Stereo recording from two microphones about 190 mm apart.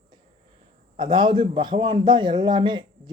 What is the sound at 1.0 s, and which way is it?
A man's voice, 25° right (ahead or behind).